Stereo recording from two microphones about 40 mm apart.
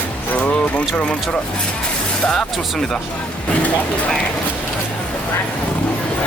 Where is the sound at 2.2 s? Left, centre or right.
Centre.